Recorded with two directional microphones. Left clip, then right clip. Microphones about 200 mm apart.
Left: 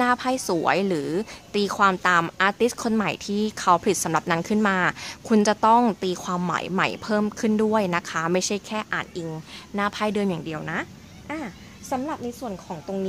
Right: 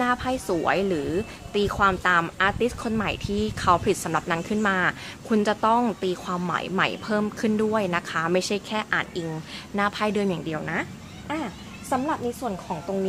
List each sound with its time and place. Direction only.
0.0 s a woman's voice: 45° left (ahead or behind)